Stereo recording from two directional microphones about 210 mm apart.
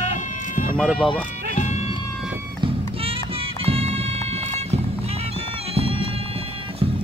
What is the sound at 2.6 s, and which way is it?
Music, 25° right (ahead or behind).